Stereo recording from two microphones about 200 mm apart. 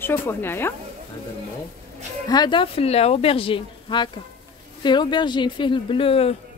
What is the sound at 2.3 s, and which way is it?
Speech, 20° left (ahead or behind).